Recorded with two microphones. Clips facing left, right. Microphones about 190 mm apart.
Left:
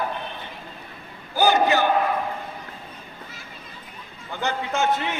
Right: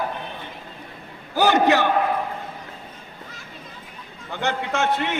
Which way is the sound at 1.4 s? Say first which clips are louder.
Right 2 dB; 70° right (ahead or behind).